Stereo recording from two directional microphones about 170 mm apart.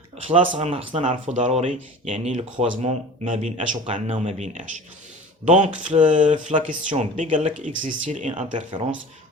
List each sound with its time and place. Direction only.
0.3 s speech: 30° right (ahead or behind)